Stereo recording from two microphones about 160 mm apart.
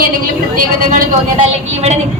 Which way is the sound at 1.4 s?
40° right (ahead or behind).